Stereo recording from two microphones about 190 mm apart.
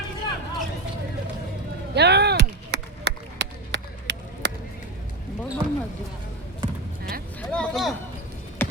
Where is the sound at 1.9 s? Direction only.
60° right (ahead or behind).